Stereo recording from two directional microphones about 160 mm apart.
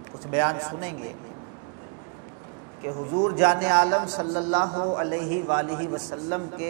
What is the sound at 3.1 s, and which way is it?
Speech, 25° right (ahead or behind).